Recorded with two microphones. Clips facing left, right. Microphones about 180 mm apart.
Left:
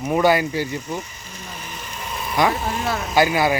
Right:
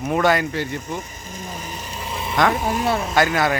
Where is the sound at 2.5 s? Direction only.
15° right (ahead or behind).